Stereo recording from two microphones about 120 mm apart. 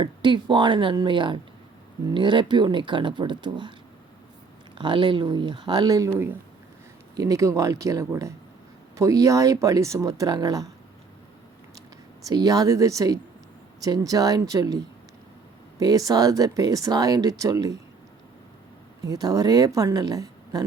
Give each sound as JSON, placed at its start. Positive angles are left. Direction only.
{"t": 0.0, "sound": "speech", "side_deg": -40}
{"t": 4.8, "sound": "speech", "side_deg": -40}
{"t": 6.1, "sound": "speech", "side_deg": -20}
{"t": 7.2, "sound": "speech", "side_deg": -30}
{"t": 12.2, "sound": "speech", "side_deg": -30}
{"t": 15.8, "sound": "speech", "side_deg": -30}
{"t": 19.0, "sound": "speech", "side_deg": -30}